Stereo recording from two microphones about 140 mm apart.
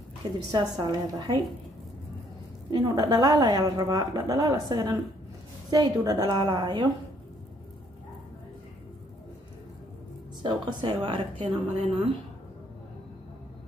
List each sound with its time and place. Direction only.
0.5 s a woman's voice: 30° right (ahead or behind)
2.7 s a woman's voice: 30° right (ahead or behind)
10.4 s speech: 35° right (ahead or behind)